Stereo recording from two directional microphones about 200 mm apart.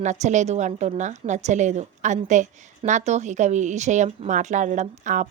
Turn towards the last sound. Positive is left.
turn(degrees=-40)  # may be behind; listen again after turning